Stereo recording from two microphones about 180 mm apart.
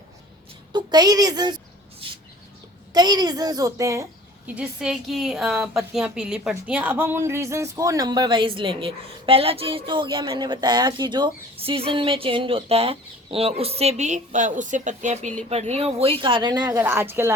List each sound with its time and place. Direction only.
0.7 s a sound: 25° right (ahead or behind)
2.9 s a woman's voice: 20° right (ahead or behind)
4.4 s a woman's voice: 5° right (ahead or behind)